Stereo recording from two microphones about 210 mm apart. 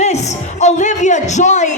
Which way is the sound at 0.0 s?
35° left (ahead or behind).